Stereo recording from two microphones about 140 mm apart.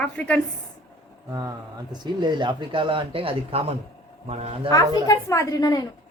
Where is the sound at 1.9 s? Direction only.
30° right (ahead or behind); by 4.5 s 50° right (ahead or behind).